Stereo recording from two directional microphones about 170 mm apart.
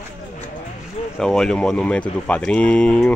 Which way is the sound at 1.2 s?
5° left (ahead or behind).